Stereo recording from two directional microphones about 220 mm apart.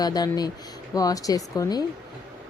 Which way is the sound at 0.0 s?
20° left (ahead or behind).